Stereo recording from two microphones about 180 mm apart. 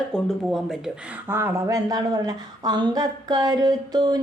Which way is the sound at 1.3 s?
15° right (ahead or behind).